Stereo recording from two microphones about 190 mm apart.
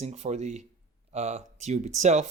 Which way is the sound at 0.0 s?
35° right (ahead or behind).